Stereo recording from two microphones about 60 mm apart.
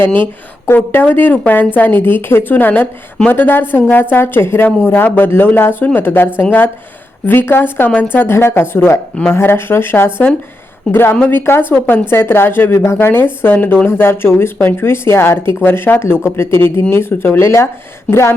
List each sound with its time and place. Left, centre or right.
0.6 s speech: left
4.9 s speech: left